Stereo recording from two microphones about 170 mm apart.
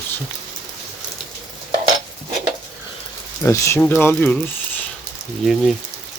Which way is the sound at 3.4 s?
15° left (ahead or behind).